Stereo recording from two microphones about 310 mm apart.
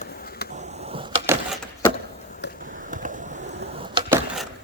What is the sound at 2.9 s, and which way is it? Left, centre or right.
Skateboard, right.